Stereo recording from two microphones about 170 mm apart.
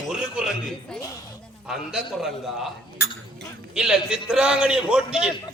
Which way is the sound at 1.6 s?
5° right (ahead or behind).